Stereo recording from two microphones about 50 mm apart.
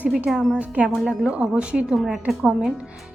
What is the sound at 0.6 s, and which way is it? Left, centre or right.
Speech, right.